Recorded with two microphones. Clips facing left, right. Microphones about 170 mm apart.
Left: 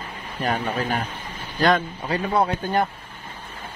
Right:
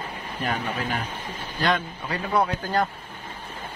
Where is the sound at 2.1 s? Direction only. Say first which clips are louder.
Left 2 dB; 25° left (ahead or behind).